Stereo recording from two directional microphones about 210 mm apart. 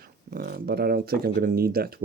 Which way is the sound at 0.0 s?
45° right (ahead or behind).